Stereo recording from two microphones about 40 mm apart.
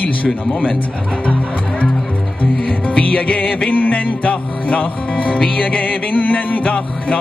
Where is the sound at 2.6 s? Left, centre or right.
Left.